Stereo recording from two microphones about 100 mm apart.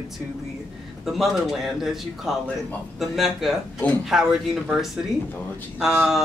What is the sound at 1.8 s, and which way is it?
Speech, centre (ahead or behind).